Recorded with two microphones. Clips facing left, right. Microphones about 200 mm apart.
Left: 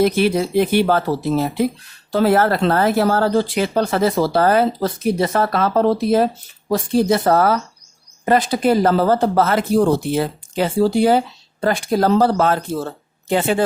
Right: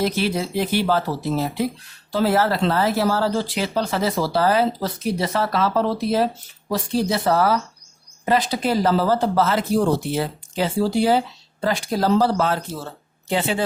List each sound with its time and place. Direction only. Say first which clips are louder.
0.0 s speech: left 6 dB; 55° left (ahead or behind)